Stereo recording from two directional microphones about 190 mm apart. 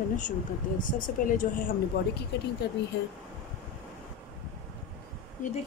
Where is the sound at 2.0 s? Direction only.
55° left (ahead or behind).